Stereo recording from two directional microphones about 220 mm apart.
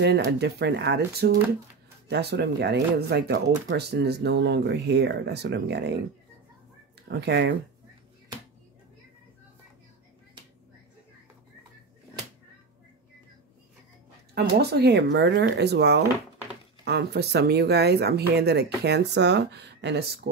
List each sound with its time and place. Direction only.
0.4 s speech: 50° right (ahead or behind)
7.1 s speech: 50° right (ahead or behind)
14.3 s speech: 45° right (ahead or behind)